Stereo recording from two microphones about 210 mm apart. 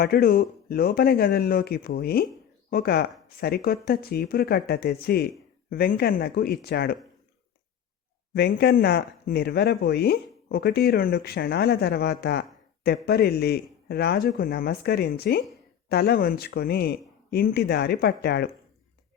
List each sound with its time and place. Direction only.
0.0 s speech: 45° left (ahead or behind)
8.4 s speech: 50° left (ahead or behind)